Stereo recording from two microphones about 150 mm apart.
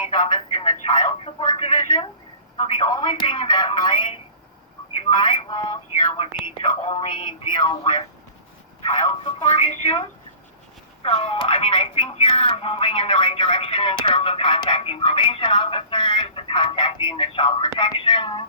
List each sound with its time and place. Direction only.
0.2 s speech: 30° left (ahead or behind)
1.2 s a sound: 40° left (ahead or behind)
2.6 s speech: 30° left (ahead or behind)
8.8 s speech: 45° left (ahead or behind)